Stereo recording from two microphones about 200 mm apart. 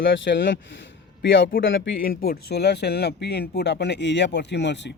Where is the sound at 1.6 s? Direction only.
70° left (ahead or behind).